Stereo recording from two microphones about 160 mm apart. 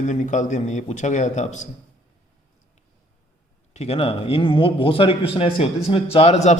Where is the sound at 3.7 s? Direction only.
40° left (ahead or behind).